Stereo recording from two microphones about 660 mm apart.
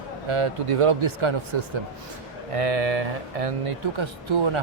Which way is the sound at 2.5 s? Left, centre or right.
Right.